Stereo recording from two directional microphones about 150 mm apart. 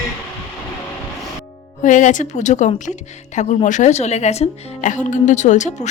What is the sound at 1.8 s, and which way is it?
A woman's voice, 55° left (ahead or behind).